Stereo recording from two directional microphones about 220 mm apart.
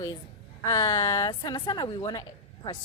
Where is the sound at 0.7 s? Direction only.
15° left (ahead or behind).